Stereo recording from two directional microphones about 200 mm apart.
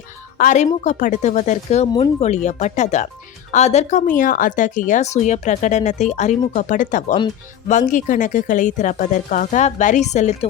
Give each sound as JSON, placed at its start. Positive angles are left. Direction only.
{"t": 0.3, "sound": "speech", "side_deg": 40}